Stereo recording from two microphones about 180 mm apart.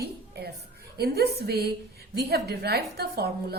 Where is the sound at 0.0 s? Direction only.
60° right (ahead or behind).